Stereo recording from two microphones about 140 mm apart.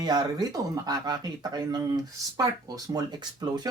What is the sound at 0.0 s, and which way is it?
Speech, 30° right (ahead or behind).